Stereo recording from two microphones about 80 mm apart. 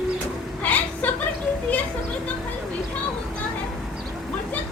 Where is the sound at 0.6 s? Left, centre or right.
Centre.